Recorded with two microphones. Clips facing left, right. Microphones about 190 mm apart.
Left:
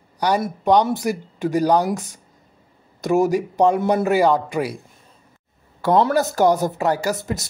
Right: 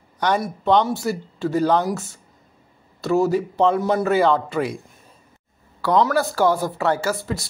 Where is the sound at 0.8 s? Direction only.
15° left (ahead or behind).